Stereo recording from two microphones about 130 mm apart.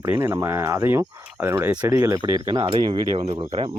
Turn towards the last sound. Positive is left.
turn(degrees=-40)  # may be behind; listen again after turning